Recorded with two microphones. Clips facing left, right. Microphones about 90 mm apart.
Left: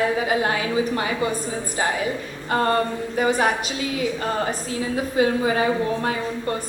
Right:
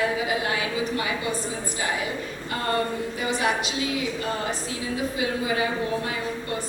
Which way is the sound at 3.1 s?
45° left (ahead or behind).